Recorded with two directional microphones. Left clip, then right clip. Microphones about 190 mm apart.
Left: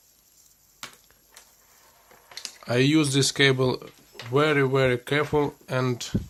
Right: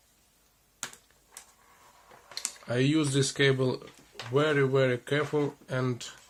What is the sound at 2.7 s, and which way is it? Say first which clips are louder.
Speech: left 6 dB; 40° left (ahead or behind).